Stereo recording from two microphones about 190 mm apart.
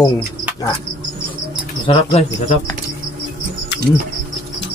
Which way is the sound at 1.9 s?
30° left (ahead or behind).